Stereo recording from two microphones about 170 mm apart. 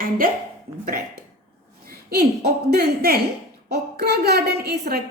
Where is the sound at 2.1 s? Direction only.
70° right (ahead or behind).